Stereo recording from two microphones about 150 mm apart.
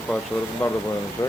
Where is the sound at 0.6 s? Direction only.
10° left (ahead or behind).